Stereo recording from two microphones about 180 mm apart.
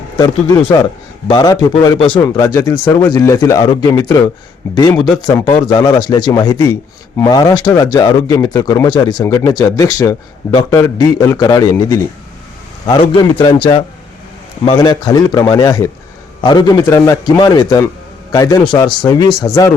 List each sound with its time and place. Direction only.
1.3 s speech: 25° left (ahead or behind)